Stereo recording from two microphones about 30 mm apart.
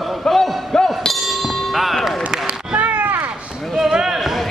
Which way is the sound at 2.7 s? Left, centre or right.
Right.